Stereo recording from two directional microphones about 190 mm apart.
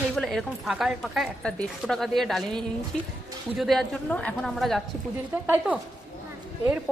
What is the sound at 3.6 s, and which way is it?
A woman's voice, centre (ahead or behind).